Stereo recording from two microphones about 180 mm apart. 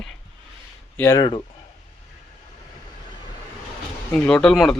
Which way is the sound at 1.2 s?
30° left (ahead or behind).